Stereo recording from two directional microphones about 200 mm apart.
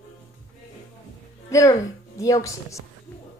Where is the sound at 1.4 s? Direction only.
15° left (ahead or behind).